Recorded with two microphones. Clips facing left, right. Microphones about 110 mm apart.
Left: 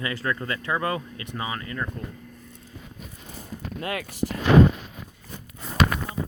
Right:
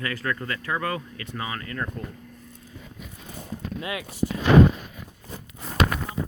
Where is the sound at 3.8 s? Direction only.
50° left (ahead or behind).